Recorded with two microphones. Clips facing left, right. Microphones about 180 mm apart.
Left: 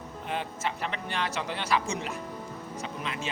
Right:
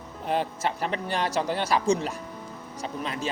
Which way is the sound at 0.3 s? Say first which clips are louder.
Right 6 dB; 40° right (ahead or behind).